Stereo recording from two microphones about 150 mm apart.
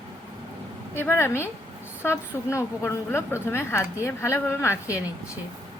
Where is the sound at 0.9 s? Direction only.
15° left (ahead or behind).